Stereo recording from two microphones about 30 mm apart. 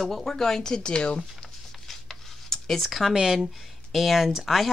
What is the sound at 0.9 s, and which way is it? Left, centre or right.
Speech, left.